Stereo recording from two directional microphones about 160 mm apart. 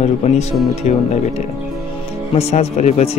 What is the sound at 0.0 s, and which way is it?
Speech, 40° left (ahead or behind).